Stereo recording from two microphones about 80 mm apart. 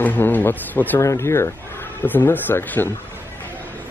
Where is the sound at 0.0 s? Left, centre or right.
Left.